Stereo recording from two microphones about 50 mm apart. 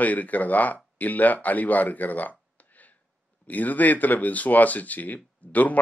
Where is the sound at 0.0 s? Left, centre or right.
Left.